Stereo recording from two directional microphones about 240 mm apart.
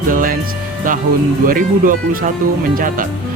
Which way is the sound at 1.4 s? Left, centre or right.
Right.